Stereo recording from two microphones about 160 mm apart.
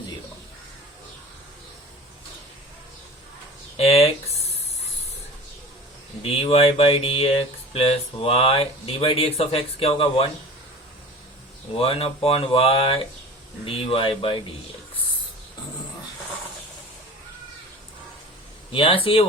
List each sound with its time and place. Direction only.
3.8 s a sound: 40° left (ahead or behind)
6.2 s speech: 35° left (ahead or behind)
11.8 s speech: 35° left (ahead or behind)
18.7 s speech: 35° left (ahead or behind)